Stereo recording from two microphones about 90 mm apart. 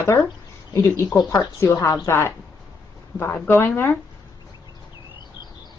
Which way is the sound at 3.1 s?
20° left (ahead or behind).